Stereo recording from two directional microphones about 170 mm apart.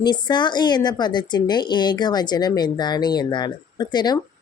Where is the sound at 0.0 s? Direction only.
25° left (ahead or behind).